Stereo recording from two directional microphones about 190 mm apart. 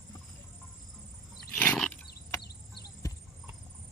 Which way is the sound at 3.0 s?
20° left (ahead or behind).